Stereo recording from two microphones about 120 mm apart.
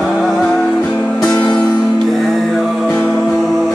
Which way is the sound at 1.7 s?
5° left (ahead or behind).